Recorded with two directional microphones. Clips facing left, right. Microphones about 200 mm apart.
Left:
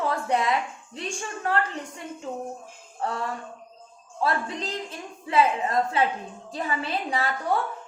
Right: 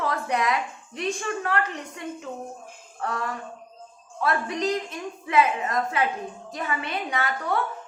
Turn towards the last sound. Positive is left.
turn(degrees=30)  # may be behind; listen again after turning